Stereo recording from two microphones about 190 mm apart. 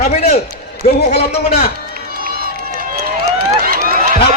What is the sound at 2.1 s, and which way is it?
Run, 50° right (ahead or behind).